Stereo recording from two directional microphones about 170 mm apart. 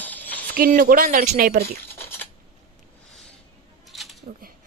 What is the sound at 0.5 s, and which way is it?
Speech, 60° right (ahead or behind).